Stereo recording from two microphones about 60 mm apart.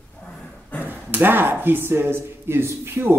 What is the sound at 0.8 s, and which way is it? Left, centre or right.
Speech, right.